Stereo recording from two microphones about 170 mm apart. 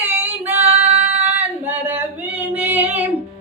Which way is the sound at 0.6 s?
40° right (ahead or behind).